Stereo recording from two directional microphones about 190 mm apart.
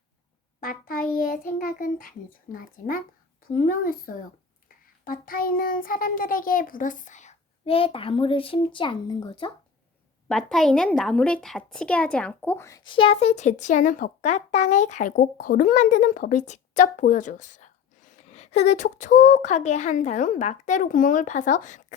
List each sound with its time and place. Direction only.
0.6 s a child's voice: 50° left (ahead or behind); by 9.5 s 25° left (ahead or behind)
10.2 s a woman's voice: centre (ahead or behind); by 21.9 s 40° left (ahead or behind)